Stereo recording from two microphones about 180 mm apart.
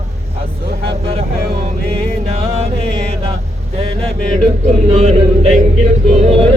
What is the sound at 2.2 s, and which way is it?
Music, 35° right (ahead or behind).